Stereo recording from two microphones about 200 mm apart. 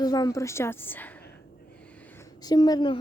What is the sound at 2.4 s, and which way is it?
Speech, 20° left (ahead or behind).